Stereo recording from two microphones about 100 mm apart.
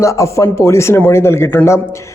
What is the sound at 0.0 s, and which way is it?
A man's voice, 30° left (ahead or behind).